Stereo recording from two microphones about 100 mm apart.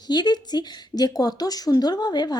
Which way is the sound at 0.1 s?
45° left (ahead or behind).